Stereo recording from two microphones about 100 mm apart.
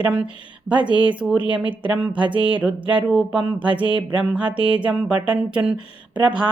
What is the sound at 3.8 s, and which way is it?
Music, 60° right (ahead or behind).